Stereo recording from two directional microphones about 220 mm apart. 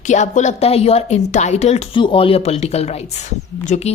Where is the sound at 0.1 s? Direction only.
30° left (ahead or behind).